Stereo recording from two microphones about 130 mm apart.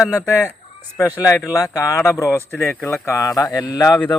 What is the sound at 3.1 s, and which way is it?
Speech, 20° left (ahead or behind).